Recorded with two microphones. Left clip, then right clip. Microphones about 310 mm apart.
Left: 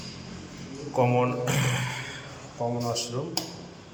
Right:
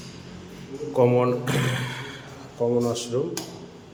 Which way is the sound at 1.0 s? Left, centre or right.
Centre.